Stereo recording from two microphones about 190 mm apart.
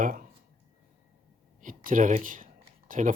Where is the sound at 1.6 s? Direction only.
45° right (ahead or behind).